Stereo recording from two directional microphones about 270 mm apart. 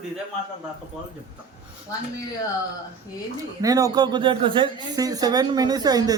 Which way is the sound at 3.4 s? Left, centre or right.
Centre.